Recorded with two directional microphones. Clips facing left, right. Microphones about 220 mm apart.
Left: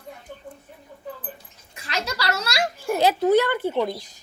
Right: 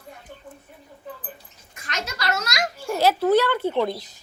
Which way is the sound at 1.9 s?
30° left (ahead or behind).